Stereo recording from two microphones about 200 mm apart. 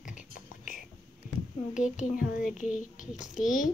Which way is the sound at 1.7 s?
40° left (ahead or behind).